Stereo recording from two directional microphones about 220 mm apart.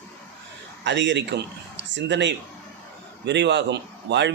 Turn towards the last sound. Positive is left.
turn(degrees=-50)  # may be behind; listen again after turning